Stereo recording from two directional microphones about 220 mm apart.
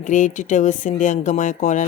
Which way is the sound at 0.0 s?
35° left (ahead or behind).